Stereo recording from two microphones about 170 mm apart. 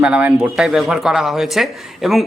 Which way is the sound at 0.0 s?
5° right (ahead or behind).